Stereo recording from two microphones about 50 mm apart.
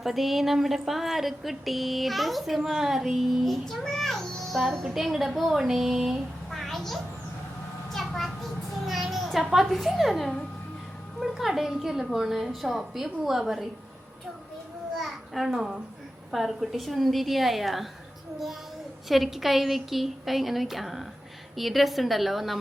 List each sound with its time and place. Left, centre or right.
0.0 s a woman's voice: centre
6.5 s a sound: centre
8.9 s a woman's voice: centre
14.9 s a sound: centre
16.3 s a woman's voice: centre
19.0 s a woman's voice: centre